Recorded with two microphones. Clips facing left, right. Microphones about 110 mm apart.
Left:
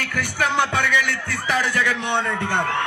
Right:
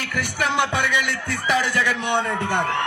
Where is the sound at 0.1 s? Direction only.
20° right (ahead or behind).